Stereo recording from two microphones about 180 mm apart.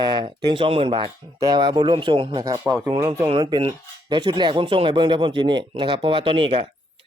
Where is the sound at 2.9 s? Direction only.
30° right (ahead or behind).